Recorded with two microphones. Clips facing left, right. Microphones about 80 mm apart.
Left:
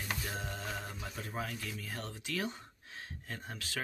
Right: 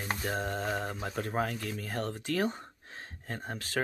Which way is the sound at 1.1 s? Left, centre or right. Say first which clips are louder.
Right 8 dB; right.